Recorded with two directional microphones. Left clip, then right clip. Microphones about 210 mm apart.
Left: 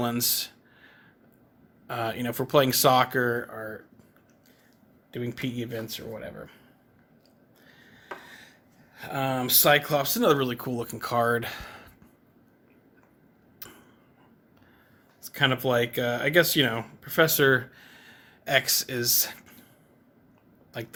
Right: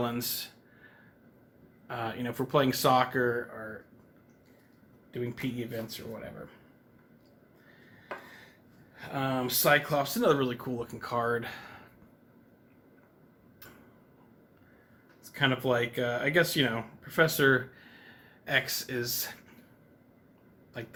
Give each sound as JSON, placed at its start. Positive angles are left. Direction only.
{"t": 0.0, "sound": "a sound", "side_deg": 50}
{"t": 1.9, "sound": "speech", "side_deg": 50}
{"t": 5.1, "sound": "speech", "side_deg": 50}
{"t": 9.0, "sound": "speech", "side_deg": 55}
{"t": 15.2, "sound": "speech", "side_deg": 55}
{"t": 20.7, "sound": "speech", "side_deg": 55}